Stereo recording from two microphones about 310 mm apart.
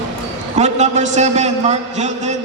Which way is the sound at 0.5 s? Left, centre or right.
Right.